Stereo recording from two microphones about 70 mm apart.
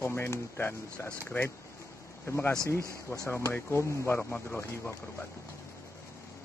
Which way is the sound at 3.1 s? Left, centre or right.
Left.